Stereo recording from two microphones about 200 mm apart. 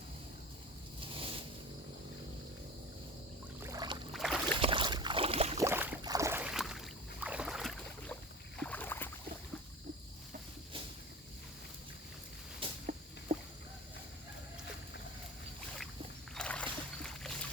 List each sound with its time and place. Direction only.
1.1 s boat: 25° right (ahead or behind)
3.6 s boat: 20° right (ahead or behind)
4.1 s boat: centre (ahead or behind)
4.6 s boat: 25° right (ahead or behind)
5.5 s boat: 10° right (ahead or behind); by 9.0 s 10° left (ahead or behind)
12.8 s a sound: 40° right (ahead or behind)
16.3 s boat: 5° left (ahead or behind)